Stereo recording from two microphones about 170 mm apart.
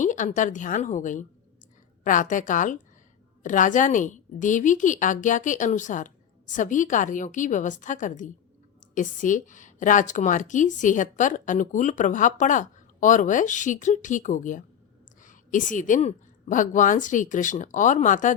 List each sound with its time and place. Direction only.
0.0 s a woman's voice: 50° left (ahead or behind)